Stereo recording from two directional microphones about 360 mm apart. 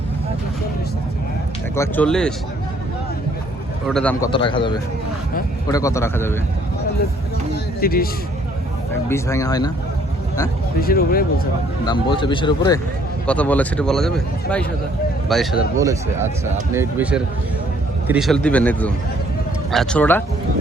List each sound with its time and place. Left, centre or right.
1.7 s speech: centre
3.8 s speech: centre
4.3 s speech: centre
7.5 s music: left
9.0 s speech: centre
10.8 s speech: left
11.9 s speech: centre
15.3 s speech: centre